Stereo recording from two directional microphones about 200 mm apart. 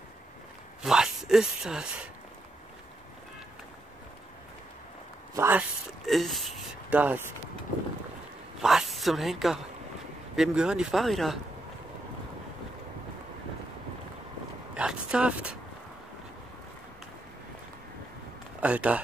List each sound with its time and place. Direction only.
0.8 s speech: centre (ahead or behind)
5.3 s speech: 10° right (ahead or behind)
8.6 s a woman's voice: centre (ahead or behind)
14.7 s speech: 5° right (ahead or behind)
18.6 s speech: 5° right (ahead or behind)